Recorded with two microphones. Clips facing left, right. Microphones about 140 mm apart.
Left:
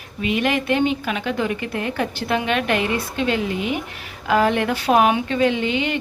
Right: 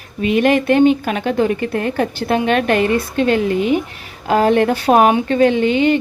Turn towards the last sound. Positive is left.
turn(degrees=-45)  # may be behind; listen again after turning